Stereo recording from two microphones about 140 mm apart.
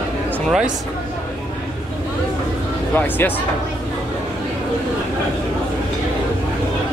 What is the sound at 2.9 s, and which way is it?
Speech, 15° left (ahead or behind).